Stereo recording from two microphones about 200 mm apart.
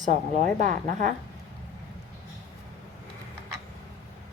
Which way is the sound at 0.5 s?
40° right (ahead or behind).